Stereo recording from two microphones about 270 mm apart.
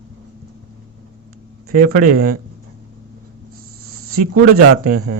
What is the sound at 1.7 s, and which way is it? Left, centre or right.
Speech, right.